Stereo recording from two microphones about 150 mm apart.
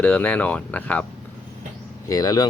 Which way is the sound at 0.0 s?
10° left (ahead or behind).